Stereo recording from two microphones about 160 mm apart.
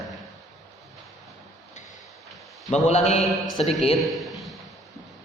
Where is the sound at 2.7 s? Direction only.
45° left (ahead or behind).